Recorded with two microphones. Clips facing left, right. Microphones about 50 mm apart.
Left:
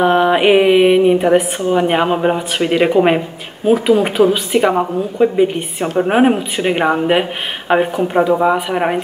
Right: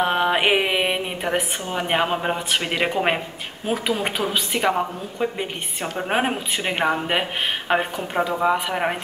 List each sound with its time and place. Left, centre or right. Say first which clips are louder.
0.0 s a woman's voice: left 8 dB; centre